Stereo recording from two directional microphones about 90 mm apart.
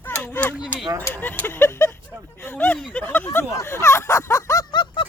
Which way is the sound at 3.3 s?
30° left (ahead or behind).